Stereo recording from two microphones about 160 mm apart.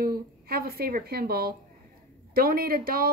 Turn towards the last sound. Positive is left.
turn(degrees=-65)  # may be behind; listen again after turning